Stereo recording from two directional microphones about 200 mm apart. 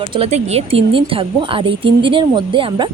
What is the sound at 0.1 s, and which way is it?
Speech, 30° right (ahead or behind).